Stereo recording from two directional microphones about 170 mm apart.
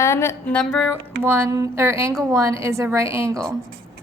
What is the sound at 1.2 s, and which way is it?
A woman's voice, 15° right (ahead or behind).